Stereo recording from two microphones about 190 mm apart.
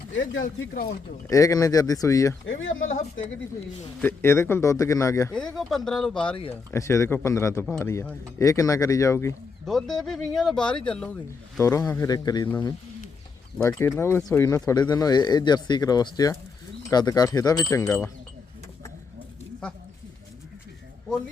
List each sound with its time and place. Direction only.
0.4 s speech: 50° left (ahead or behind)
1.3 s speech: 15° left (ahead or behind)
2.5 s speech: 90° left
4.0 s speech: 15° left (ahead or behind)
5.3 s speech: 5° left (ahead or behind)
9.6 s speech: centre (ahead or behind); by 12.5 s 20° left (ahead or behind)
13.6 s speech: 10° left (ahead or behind)